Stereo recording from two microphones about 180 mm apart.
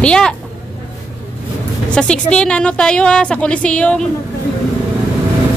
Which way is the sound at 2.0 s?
5° left (ahead or behind).